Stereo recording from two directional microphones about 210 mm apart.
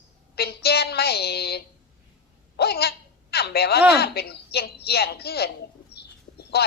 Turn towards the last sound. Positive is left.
turn(degrees=50)  # may be behind; listen again after turning